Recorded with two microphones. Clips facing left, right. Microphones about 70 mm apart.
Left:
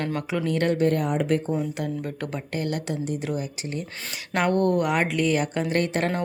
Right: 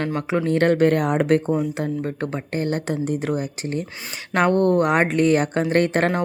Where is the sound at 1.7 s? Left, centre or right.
Right.